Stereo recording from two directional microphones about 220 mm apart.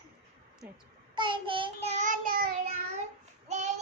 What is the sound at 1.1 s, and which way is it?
Child singing, 20° right (ahead or behind).